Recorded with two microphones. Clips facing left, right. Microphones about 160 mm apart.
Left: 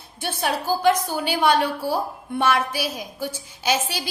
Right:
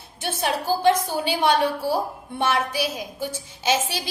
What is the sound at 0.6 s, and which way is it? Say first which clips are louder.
A woman's voice: even; 25° right (ahead or behind).